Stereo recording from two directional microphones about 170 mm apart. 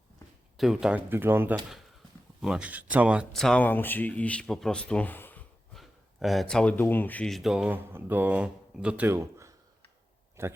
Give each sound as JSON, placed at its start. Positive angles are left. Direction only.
{"t": 0.5, "sound": "speech", "side_deg": 0}